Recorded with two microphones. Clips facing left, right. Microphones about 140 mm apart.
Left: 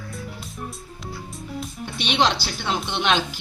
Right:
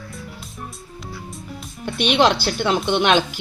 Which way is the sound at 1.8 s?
55° right (ahead or behind).